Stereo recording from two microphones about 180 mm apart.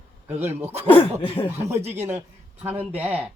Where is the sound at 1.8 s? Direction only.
35° right (ahead or behind).